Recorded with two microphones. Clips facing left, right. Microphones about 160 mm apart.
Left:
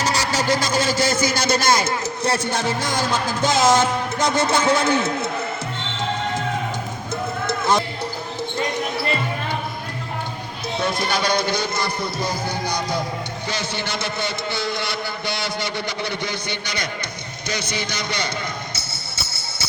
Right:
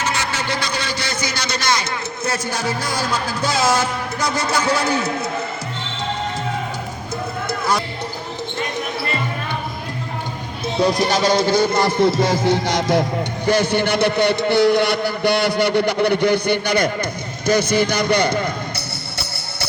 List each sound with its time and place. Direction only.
0.0 s a man's voice: 40° left (ahead or behind)
2.5 s music: 25° left (ahead or behind)
10.8 s speech: 35° right (ahead or behind); by 12.1 s 65° right (ahead or behind)
12.2 s a man's voice: 90° right; by 18.4 s 55° right (ahead or behind)